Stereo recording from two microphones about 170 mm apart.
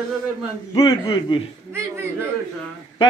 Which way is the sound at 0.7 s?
30° left (ahead or behind).